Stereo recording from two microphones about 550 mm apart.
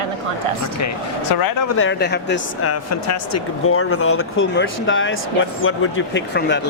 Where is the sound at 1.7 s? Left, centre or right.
Left.